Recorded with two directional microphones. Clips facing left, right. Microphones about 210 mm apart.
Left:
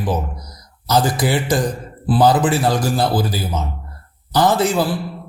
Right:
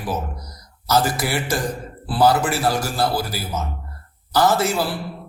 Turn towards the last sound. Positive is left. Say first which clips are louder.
# left 3 dB
turn(degrees=15)  # may be behind; listen again after turning